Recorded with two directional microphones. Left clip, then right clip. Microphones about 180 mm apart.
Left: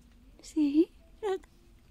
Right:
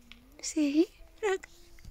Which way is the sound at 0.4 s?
10° left (ahead or behind).